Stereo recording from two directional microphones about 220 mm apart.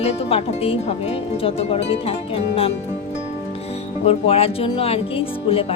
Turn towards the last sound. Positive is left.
turn(degrees=25)  # may be behind; listen again after turning